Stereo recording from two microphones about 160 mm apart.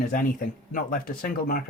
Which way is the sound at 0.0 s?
60° left (ahead or behind).